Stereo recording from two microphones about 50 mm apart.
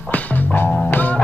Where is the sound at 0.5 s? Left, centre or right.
Left.